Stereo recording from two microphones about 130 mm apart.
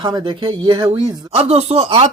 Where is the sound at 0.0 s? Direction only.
35° right (ahead or behind).